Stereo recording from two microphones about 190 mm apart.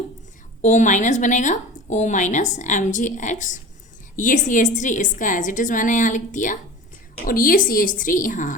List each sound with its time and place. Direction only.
0.6 s a woman's voice: 40° left (ahead or behind)